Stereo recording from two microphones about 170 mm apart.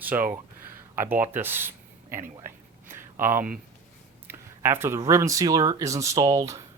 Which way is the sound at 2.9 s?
15° right (ahead or behind).